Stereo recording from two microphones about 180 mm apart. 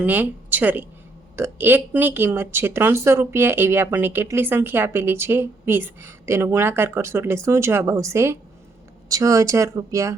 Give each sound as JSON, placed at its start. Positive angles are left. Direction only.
{"t": 0.0, "sound": "a woman's voice", "side_deg": -10}